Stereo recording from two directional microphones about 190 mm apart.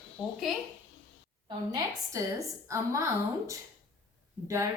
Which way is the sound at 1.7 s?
20° right (ahead or behind).